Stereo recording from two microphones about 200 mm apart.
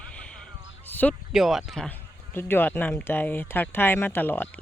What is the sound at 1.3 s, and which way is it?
Speech, centre (ahead or behind).